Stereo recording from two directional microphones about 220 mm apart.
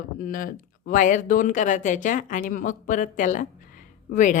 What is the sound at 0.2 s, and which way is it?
A woman's voice, 40° left (ahead or behind).